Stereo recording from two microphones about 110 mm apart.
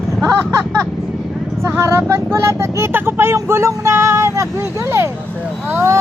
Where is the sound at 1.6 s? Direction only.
25° right (ahead or behind).